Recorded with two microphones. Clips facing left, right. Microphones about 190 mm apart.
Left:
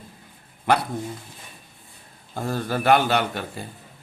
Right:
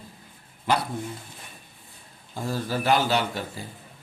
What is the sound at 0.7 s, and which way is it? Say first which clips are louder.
Speech: left 3 dB; 60° left (ahead or behind).